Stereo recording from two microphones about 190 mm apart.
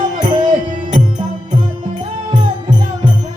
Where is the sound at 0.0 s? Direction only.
40° right (ahead or behind).